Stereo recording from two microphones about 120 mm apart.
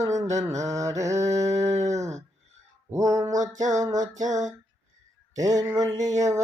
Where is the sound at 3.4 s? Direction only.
90° right.